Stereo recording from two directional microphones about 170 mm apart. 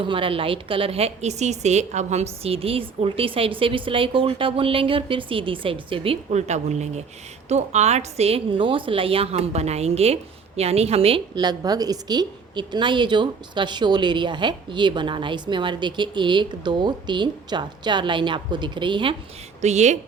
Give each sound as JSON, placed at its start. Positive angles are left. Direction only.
{"t": 0.0, "sound": "a woman's voice", "side_deg": -30}
{"t": 19.6, "sound": "speech", "side_deg": -40}